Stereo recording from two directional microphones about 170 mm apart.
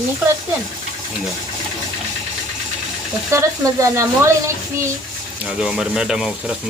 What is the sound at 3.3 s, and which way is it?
Speech, 20° right (ahead or behind).